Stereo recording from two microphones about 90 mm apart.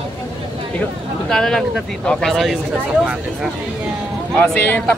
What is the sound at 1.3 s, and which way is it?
Speech, 5° left (ahead or behind).